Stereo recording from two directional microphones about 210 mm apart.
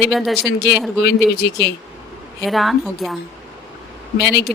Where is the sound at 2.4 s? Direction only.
Centre (ahead or behind).